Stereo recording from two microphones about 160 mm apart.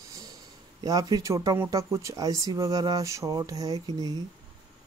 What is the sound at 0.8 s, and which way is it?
Speech, 25° right (ahead or behind).